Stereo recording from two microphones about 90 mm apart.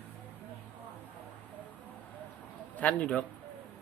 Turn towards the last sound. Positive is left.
turn(degrees=15)  # may be behind; listen again after turning